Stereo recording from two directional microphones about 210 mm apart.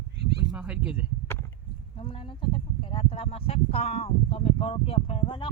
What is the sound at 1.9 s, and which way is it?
Speech, 25° left (ahead or behind).